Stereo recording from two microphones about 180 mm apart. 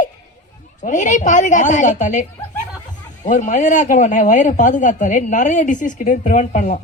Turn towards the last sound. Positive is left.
turn(degrees=45)  # may be behind; listen again after turning